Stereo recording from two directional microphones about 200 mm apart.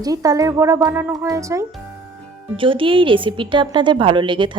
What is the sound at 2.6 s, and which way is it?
A woman's voice, 25° right (ahead or behind).